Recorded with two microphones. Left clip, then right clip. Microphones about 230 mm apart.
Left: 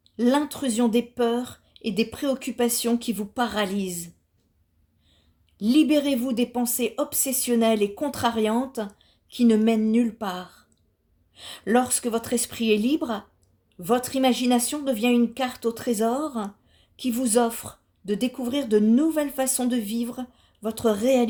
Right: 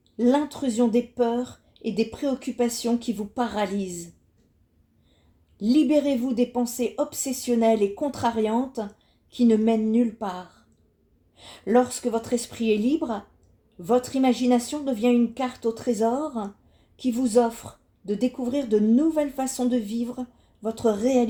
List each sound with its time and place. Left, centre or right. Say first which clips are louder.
0.2 s a woman's voice: even; left
5.5 s a woman's voice: even; left